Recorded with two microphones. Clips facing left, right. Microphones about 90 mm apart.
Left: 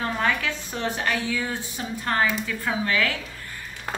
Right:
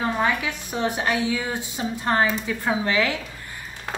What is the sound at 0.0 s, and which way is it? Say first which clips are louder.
A woman's voice: right 2 dB; 15° right (ahead or behind).